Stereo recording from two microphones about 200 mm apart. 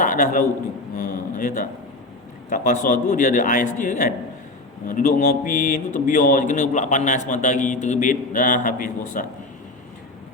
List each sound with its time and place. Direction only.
0.0 s a man's voice: 40° left (ahead or behind)
0.9 s a sound: 40° left (ahead or behind)
2.5 s a man's voice: 40° left (ahead or behind)